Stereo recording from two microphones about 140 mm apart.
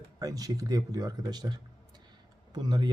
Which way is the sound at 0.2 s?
25° right (ahead or behind).